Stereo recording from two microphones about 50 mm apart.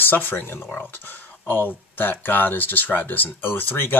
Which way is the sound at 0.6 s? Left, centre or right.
Centre.